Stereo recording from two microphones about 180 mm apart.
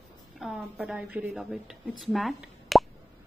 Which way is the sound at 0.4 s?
Centre (ahead or behind).